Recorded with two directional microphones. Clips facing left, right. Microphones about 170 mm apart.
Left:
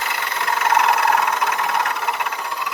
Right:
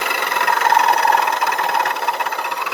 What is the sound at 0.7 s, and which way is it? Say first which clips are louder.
Engine: right 1 dB; 35° right (ahead or behind).